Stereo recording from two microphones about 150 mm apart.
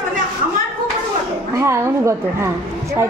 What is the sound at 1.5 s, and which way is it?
Speech, 20° right (ahead or behind).